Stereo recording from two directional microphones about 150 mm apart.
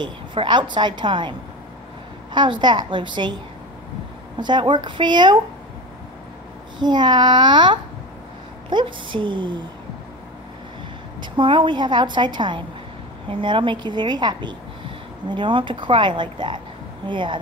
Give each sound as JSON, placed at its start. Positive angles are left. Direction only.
{"t": 0.0, "sound": "a woman's voice", "side_deg": -30}
{"t": 2.3, "sound": "a woman's voice", "side_deg": -30}
{"t": 4.4, "sound": "a woman's voice", "side_deg": -30}
{"t": 6.8, "sound": "a woman's voice", "side_deg": -30}
{"t": 11.1, "sound": "a woman's voice", "side_deg": -30}